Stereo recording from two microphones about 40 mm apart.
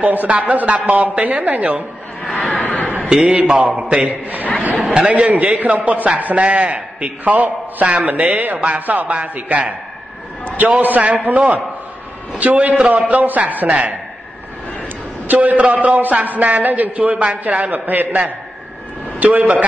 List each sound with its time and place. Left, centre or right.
0.0 s a man's voice: right
2.3 s a sound: left
3.3 s a man's voice: right
10.8 s a man's voice: right
15.3 s a man's voice: right
17.4 s a man's voice: right